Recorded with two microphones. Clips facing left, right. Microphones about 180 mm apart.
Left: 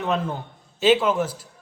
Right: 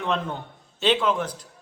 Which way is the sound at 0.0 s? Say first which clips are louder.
Left 2 dB; 5° left (ahead or behind).